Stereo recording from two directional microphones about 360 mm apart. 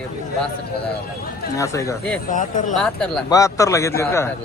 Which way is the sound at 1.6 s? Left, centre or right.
Centre.